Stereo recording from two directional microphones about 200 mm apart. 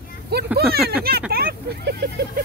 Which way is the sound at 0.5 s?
50° right (ahead or behind).